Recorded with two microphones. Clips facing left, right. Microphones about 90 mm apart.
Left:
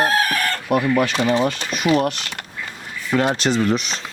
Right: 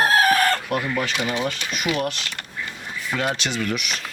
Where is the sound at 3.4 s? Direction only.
35° left (ahead or behind).